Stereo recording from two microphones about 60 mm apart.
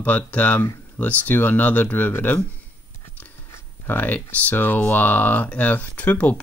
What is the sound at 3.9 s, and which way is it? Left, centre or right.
Speech, left.